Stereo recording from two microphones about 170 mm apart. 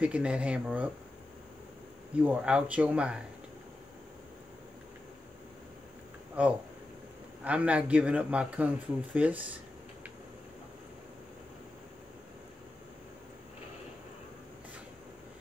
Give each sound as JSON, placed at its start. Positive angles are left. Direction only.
{"t": 0.0, "sound": "a man's voice", "side_deg": -5}
{"t": 2.1, "sound": "a man's voice", "side_deg": -5}
{"t": 6.4, "sound": "a man's voice", "side_deg": -10}